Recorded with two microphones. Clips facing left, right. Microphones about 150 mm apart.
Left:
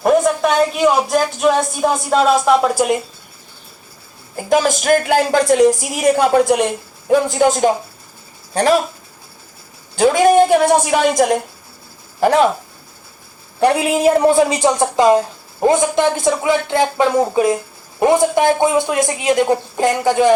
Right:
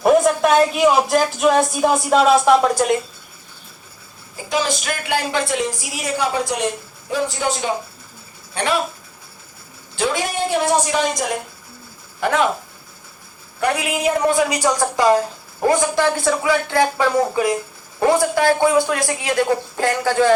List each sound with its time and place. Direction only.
0.0 s a woman's voice: centre (ahead or behind)
4.4 s a woman's voice: 50° left (ahead or behind)
8.5 s speech: 40° left (ahead or behind)
9.9 s a woman's voice: 45° left (ahead or behind)
12.2 s speech: 35° left (ahead or behind)
13.6 s a woman's voice: 30° left (ahead or behind)